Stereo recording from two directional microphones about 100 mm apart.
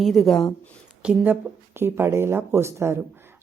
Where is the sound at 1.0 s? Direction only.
20° right (ahead or behind).